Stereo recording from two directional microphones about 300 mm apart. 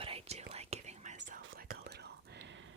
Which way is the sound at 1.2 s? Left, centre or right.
Right.